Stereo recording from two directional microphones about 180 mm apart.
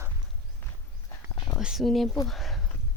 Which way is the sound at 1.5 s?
Centre (ahead or behind).